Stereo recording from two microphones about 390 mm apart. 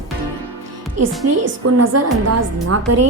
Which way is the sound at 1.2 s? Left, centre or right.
Right.